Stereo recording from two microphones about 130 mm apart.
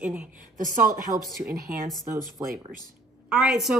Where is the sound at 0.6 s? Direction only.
90° right.